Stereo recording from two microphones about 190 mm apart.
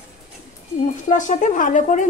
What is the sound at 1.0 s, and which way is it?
A woman's voice, 40° left (ahead or behind).